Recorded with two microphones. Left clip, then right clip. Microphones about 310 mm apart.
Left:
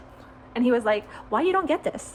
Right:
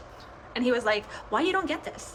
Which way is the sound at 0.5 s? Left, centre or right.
Centre.